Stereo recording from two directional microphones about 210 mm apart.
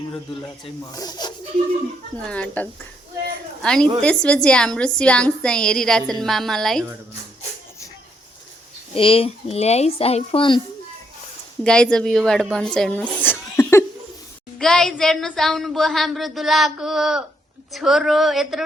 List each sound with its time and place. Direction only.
0.4 s speech: 15° left (ahead or behind)
2.2 s speech: 5° left (ahead or behind)
8.9 s speech: 25° left (ahead or behind)
11.6 s speech: 5° left (ahead or behind)
13.2 s cough: 10° left (ahead or behind)
14.6 s speech: 5° left (ahead or behind)